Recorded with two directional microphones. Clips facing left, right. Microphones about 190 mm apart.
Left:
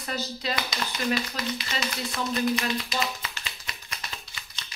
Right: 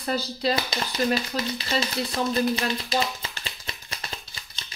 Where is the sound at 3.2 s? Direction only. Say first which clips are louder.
Right 2 dB; 30° right (ahead or behind).